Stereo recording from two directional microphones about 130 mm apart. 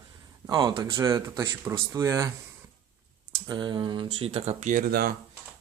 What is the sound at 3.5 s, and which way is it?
Speech, 35° right (ahead or behind).